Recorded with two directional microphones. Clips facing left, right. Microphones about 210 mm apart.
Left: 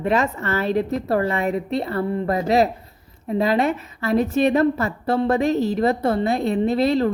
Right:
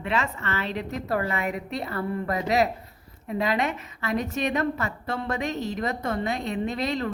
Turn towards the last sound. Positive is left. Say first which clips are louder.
# left 9 dB
turn(degrees=35)  # may be behind; listen again after turning